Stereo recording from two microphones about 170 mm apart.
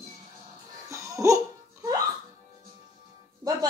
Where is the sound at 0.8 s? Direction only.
20° right (ahead or behind).